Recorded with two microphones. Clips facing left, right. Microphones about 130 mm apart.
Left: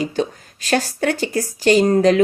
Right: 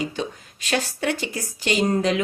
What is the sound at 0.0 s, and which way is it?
A woman's voice, 40° left (ahead or behind).